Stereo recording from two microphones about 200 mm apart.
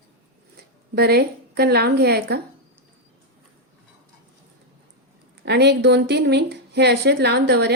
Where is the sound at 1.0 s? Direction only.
55° right (ahead or behind).